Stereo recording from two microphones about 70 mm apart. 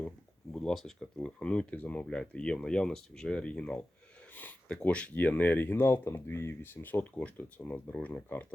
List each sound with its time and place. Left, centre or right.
0.5 s speech: centre
1.2 s speech: centre